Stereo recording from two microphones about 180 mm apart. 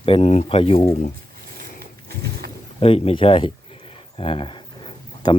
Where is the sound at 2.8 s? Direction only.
30° left (ahead or behind).